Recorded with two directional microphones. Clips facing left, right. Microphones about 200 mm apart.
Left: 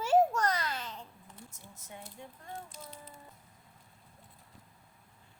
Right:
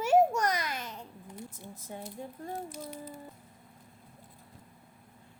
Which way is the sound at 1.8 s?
35° right (ahead or behind).